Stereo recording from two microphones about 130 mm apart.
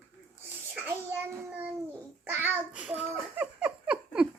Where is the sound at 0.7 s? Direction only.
15° right (ahead or behind).